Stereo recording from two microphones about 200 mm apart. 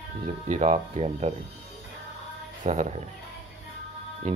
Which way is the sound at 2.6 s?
40° right (ahead or behind).